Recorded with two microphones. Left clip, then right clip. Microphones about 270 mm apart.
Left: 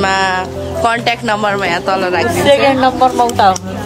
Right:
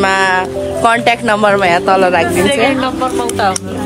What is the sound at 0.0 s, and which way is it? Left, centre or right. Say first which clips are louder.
Music: right 2 dB; centre.